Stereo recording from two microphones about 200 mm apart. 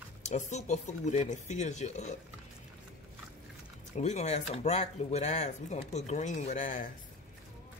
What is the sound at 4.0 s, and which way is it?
Speech, 35° left (ahead or behind).